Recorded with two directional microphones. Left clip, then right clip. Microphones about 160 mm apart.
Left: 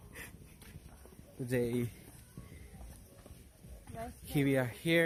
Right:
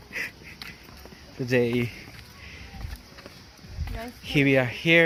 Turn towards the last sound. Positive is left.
turn(degrees=5)  # may be behind; listen again after turning